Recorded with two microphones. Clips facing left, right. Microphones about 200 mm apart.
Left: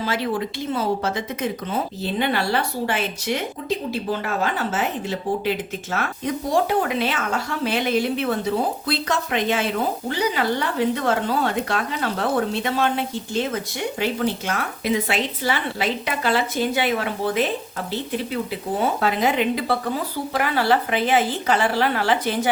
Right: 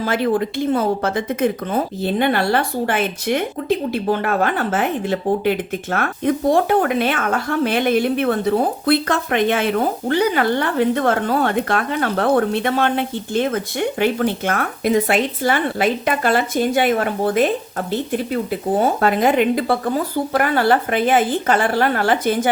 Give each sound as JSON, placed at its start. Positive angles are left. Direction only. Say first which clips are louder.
{"t": 0.0, "sound": "speech", "louder": "right 6 dB", "side_deg": -55}
{"t": 18.8, "sound": "a woman's voice", "louder": "right 4 dB", "side_deg": -50}